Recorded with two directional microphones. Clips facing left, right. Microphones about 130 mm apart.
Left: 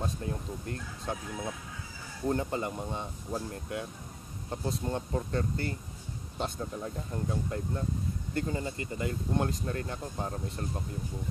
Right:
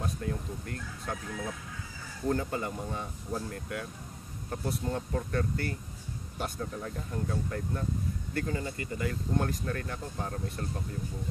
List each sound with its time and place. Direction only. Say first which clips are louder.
0.0 s speech: even; 25° left (ahead or behind)
2.2 s speech: even; 25° left (ahead or behind)